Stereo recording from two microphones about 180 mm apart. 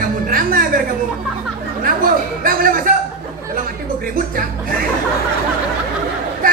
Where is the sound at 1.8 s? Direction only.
50° right (ahead or behind).